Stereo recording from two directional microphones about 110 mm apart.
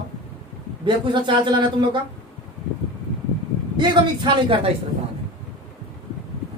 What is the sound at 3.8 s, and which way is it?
Speech, 50° right (ahead or behind).